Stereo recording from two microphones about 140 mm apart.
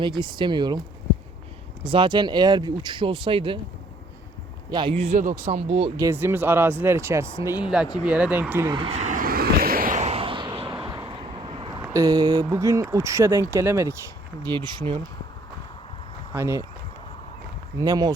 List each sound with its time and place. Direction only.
0.0 s speech: 35° right (ahead or behind)
1.8 s speech: 35° right (ahead or behind)
4.7 s speech: 35° right (ahead or behind)
5.1 s speech: 65° right (ahead or behind); by 5.9 s 45° right (ahead or behind)
6.0 s speech: 20° right (ahead or behind)
8.9 s vehicle: 60° right (ahead or behind); by 10.0 s 85° right
10.0 s a sound: 45° right (ahead or behind)
10.6 s vehicle: 35° right (ahead or behind)
11.2 s vehicle: 40° right (ahead or behind)
11.9 s speech: 25° right (ahead or behind)
14.4 s speech: 35° right (ahead or behind)
16.3 s speech: 20° right (ahead or behind)
17.7 s speech: 25° right (ahead or behind)